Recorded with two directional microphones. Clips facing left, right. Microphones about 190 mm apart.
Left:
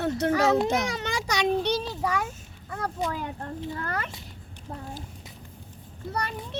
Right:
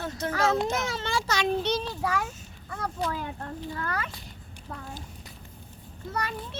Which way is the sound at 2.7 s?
15° left (ahead or behind).